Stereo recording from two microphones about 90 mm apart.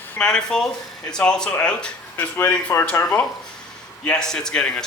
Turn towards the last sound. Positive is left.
turn(degrees=10)  # may be behind; listen again after turning